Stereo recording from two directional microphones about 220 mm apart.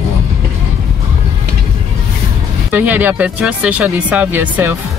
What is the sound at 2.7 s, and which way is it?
Speech, 10° right (ahead or behind).